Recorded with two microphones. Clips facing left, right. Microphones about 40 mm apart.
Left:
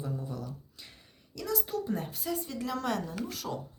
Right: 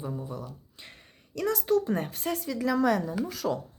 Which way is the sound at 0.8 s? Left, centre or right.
Right.